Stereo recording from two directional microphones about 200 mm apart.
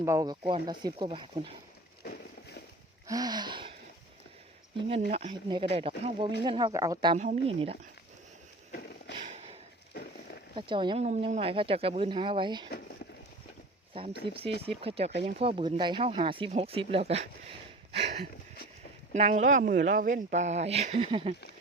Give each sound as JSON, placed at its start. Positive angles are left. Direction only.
{"t": 0.0, "sound": "speech", "side_deg": -15}
{"t": 2.0, "sound": "a sound", "side_deg": 55}
{"t": 3.1, "sound": "speech", "side_deg": -20}
{"t": 5.1, "sound": "speech", "side_deg": -25}
{"t": 7.2, "sound": "speech", "side_deg": -35}
{"t": 10.5, "sound": "speech", "side_deg": -25}
{"t": 13.9, "sound": "speech", "side_deg": -25}
{"t": 17.9, "sound": "a sound", "side_deg": -30}
{"t": 19.1, "sound": "speech", "side_deg": -35}